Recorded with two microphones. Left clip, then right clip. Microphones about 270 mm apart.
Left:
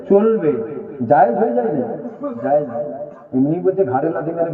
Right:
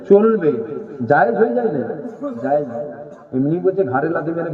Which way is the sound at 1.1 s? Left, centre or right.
Right.